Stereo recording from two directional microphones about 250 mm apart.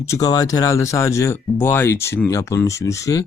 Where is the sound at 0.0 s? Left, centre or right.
Centre.